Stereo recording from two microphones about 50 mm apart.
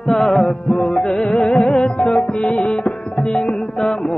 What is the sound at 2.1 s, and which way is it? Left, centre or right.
Music, centre.